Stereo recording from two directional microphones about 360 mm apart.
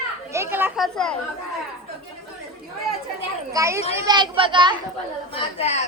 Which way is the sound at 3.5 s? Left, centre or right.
Centre.